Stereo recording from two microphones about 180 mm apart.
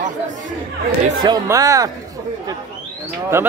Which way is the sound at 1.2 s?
20° right (ahead or behind).